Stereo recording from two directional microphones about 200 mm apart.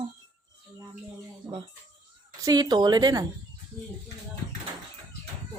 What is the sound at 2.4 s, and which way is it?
Speech, 20° right (ahead or behind).